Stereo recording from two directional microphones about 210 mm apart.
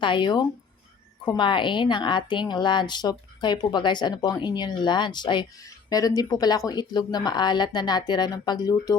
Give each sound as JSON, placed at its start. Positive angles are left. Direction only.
{"t": 0.0, "sound": "a woman's voice", "side_deg": 25}